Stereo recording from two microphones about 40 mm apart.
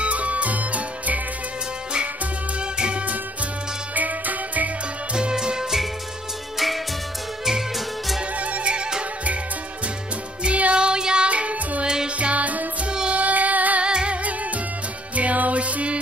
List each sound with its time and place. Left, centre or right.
0.0 s music: right
2.6 s music: right
3.9 s music: right
5.1 s music: centre
7.4 s music: centre
8.4 s music: right
10.4 s music: right
11.2 s music: right
13.1 s child singing: right
13.8 s music: right
15.1 s music: right